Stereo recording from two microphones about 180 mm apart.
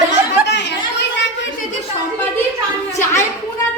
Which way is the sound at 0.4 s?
75° left (ahead or behind).